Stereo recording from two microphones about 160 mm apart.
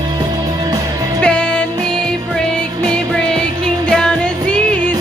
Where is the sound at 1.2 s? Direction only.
5° left (ahead or behind).